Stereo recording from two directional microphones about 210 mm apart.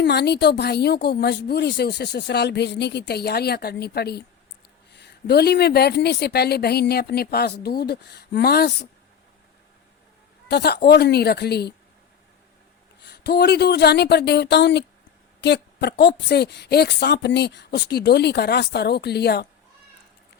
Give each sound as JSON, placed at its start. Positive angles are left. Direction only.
{"t": 0.0, "sound": "a woman's voice", "side_deg": 50}
{"t": 10.5, "sound": "a woman's voice", "side_deg": 50}
{"t": 13.0, "sound": "a woman's voice", "side_deg": 50}